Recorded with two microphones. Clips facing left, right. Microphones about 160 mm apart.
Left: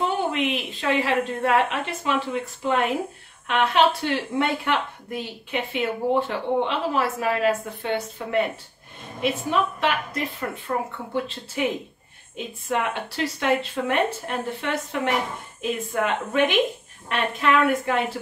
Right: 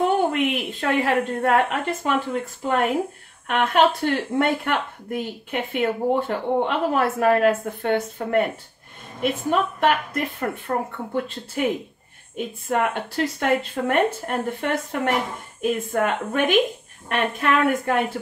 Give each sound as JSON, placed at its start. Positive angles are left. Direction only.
{"t": 0.0, "sound": "a woman's voice", "side_deg": -50}